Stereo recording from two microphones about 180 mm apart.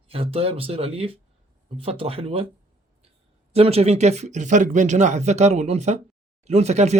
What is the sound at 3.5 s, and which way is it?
Speech, 35° right (ahead or behind).